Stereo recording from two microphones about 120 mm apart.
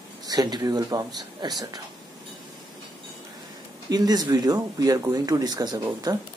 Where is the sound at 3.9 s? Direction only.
35° right (ahead or behind).